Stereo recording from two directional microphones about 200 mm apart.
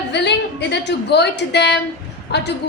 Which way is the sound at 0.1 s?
60° left (ahead or behind).